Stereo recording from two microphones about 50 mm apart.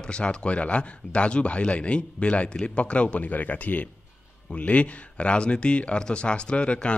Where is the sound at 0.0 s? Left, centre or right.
Centre.